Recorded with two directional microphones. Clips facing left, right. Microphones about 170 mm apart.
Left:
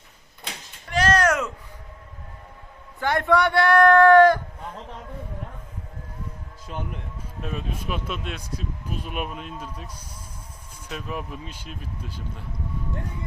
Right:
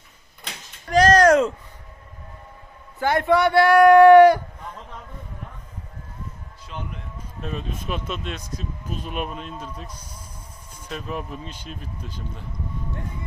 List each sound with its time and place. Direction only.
0.9 s a sound: 40° right (ahead or behind)
3.0 s speech: 5° right (ahead or behind)
7.4 s speech: 5° left (ahead or behind)